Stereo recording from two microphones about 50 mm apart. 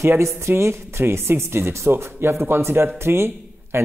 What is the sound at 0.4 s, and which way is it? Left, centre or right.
Speech, right.